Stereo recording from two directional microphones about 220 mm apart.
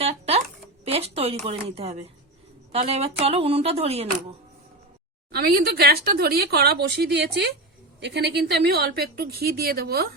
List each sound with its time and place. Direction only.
0.0 s a sound: 30° right (ahead or behind)
0.9 s speech: 25° right (ahead or behind)
5.3 s a woman's voice: 45° right (ahead or behind)